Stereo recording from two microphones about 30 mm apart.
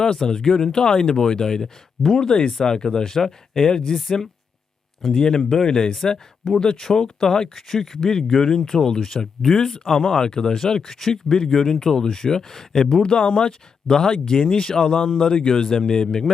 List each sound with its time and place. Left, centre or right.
0.0 s speech: left
3.7 s speech: left
3.9 s speech: centre
5.6 s speech: left
5.9 s speech: centre
6.6 s speech: left
7.7 s speech: centre
7.9 s speech: centre
10.2 s speech: left
13.0 s speech: left
15.7 s speech: centre